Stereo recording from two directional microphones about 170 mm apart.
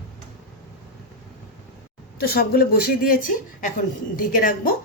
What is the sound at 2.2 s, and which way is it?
Speech, 65° left (ahead or behind).